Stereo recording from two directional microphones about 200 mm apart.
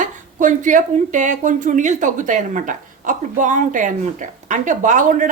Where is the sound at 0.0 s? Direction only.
40° right (ahead or behind).